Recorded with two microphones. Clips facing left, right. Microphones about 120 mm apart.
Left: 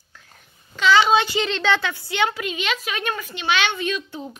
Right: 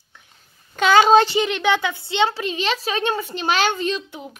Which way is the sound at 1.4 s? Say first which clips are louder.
Right 2 dB; 15° right (ahead or behind).